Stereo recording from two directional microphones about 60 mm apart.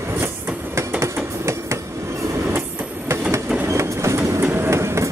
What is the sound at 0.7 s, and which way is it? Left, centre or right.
Train, right.